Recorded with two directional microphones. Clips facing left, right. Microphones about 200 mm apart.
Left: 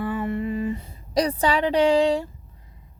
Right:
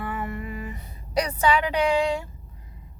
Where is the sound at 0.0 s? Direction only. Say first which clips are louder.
Left 6 dB; 30° left (ahead or behind).